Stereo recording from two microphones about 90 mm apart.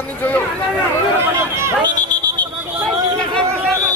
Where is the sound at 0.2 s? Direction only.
20° left (ahead or behind).